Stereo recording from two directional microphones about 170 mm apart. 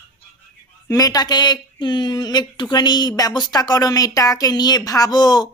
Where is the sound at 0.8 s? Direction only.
20° left (ahead or behind).